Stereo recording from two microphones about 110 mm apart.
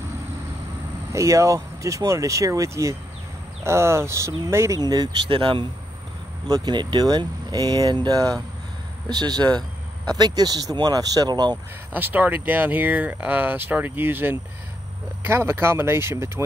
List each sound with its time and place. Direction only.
1.1 s speech: 30° right (ahead or behind); by 5.7 s 50° right (ahead or behind)
6.4 s speech: 35° right (ahead or behind)
11.5 s speech: 15° right (ahead or behind)